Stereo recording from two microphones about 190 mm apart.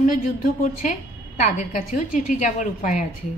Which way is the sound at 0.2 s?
40° left (ahead or behind).